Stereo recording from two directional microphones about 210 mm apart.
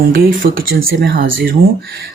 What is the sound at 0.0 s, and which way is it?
Speech, 45° right (ahead or behind).